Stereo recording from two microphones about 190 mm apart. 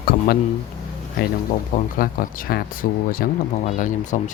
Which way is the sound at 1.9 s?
45° left (ahead or behind).